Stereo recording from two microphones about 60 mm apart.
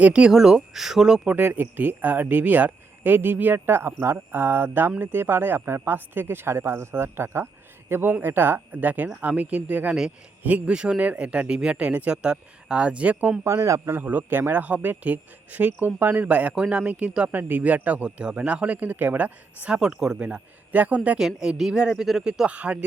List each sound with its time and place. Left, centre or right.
0.0 s speech: centre
0.3 s speech: centre
1.3 s speech: right
13.4 s speech: right
13.9 s speech: right
16.2 s speech: right
19.7 s speech: centre
21.2 s speech: centre